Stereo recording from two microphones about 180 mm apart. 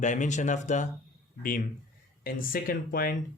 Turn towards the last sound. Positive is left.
turn(degrees=50)  # may be behind; listen again after turning